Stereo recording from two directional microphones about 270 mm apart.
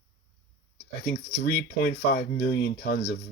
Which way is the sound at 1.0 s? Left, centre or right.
Left.